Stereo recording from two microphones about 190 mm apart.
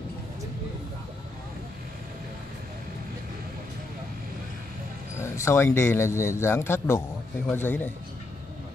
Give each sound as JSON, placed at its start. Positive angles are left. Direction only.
{"t": 5.2, "sound": "a man's voice", "side_deg": 15}